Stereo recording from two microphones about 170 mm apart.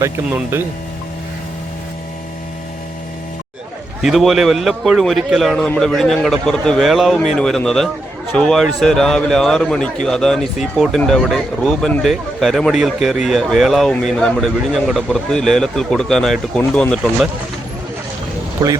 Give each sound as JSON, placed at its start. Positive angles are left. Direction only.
{"t": 0.0, "sound": "speech", "side_deg": -10}
{"t": 4.0, "sound": "a man's voice", "side_deg": 0}
{"t": 18.6, "sound": "speech", "side_deg": -25}